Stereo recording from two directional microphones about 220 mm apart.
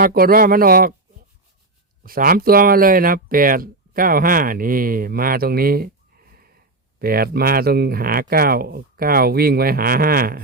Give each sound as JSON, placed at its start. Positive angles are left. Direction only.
{"t": 0.0, "sound": "speech", "side_deg": -40}
{"t": 2.0, "sound": "speech", "side_deg": -40}
{"t": 7.0, "sound": "speech", "side_deg": -45}